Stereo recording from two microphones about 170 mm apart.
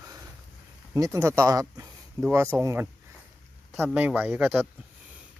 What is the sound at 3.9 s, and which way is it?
Speech, 10° right (ahead or behind).